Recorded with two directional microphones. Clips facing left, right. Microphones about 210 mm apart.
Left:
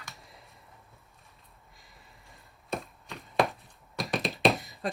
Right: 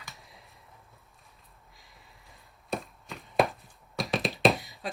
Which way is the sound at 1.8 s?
Centre (ahead or behind).